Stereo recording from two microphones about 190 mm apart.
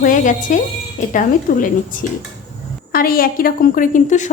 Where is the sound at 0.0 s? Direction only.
45° left (ahead or behind).